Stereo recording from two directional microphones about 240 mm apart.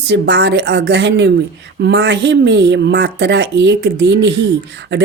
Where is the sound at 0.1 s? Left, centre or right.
Right.